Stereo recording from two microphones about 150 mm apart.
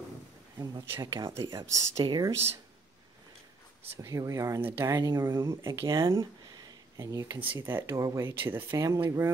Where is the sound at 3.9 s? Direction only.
20° right (ahead or behind).